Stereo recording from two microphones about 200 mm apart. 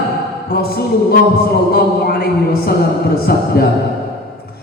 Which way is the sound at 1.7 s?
50° left (ahead or behind).